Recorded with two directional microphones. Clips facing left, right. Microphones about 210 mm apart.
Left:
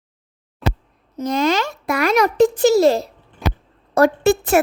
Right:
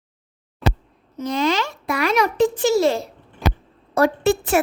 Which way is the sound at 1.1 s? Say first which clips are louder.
Left 2 dB; 45° left (ahead or behind).